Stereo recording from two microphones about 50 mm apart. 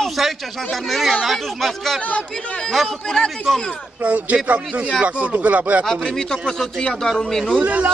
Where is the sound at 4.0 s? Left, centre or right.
Right.